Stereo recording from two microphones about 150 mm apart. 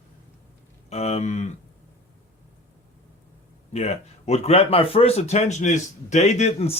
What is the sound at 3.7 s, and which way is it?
A man's voice, 45° left (ahead or behind).